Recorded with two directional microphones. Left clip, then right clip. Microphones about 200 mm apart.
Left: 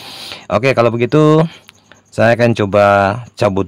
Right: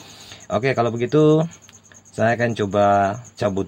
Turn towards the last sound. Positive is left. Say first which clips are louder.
# left 8 dB
turn(degrees=40)  # may be behind; listen again after turning